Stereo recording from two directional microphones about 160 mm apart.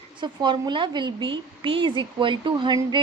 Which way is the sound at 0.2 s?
30° right (ahead or behind).